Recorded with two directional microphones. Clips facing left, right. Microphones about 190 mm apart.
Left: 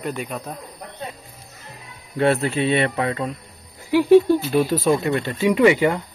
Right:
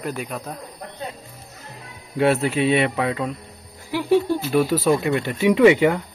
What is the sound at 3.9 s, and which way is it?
Speech, 15° left (ahead or behind).